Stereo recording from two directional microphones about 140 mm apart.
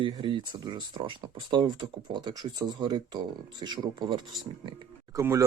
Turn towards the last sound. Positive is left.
turn(degrees=-20)  # may be behind; listen again after turning